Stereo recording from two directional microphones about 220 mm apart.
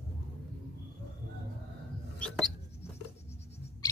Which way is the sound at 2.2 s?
5° left (ahead or behind).